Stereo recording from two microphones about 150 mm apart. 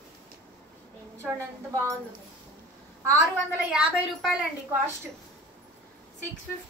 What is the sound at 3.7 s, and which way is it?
Speech, 5° right (ahead or behind).